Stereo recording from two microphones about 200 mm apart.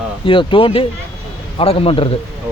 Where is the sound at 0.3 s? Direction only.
25° left (ahead or behind).